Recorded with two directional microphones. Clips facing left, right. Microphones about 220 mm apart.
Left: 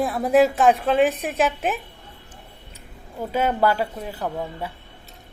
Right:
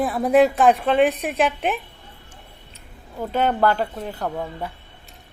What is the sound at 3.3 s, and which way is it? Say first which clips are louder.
Speech: right 1 dB; 10° left (ahead or behind).